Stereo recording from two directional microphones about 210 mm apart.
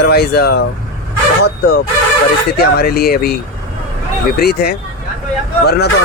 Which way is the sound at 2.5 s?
45° left (ahead or behind).